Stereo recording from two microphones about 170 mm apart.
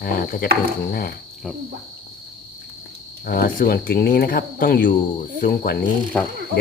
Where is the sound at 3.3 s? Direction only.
55° left (ahead or behind).